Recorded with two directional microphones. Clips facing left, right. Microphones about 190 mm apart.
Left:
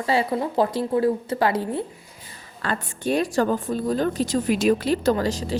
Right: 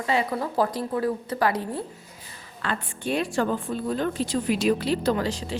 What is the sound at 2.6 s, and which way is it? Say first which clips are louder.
A woman's voice: left 3 dB; 40° left (ahead or behind).